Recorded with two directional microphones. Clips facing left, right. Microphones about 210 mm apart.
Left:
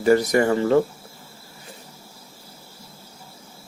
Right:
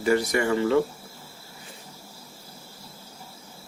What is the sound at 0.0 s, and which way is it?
Speech, 40° left (ahead or behind).